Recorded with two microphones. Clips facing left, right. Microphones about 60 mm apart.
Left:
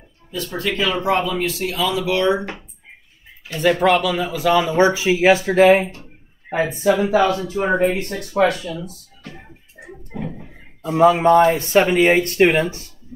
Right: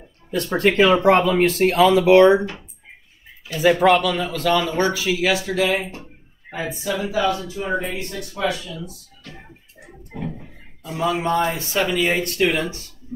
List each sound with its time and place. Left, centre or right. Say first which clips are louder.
0.3 s speech: right 5 dB; right
1.0 s speech: right 4 dB; right
3.5 s speech: right 1 dB; centre; by 8.7 s left
9.2 s music: left 3 dB; left
9.8 s a sound: left 7 dB; left
10.1 s a sound: left 1 dB; centre
10.8 s speech: left 9 dB; left